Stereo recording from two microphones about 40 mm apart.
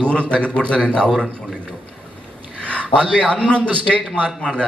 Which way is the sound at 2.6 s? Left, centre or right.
Left.